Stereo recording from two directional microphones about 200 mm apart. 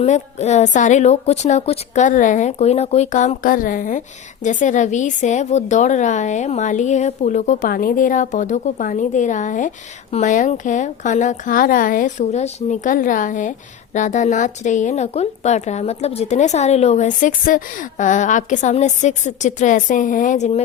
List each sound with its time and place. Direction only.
0.0 s a woman's voice: 35° left (ahead or behind)